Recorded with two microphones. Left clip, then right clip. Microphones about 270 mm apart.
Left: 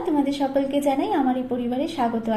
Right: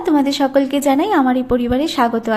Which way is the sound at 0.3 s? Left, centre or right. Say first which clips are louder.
Right 7 dB; right.